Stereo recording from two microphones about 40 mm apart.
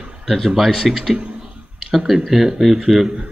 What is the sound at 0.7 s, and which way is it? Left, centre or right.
A man's voice, centre.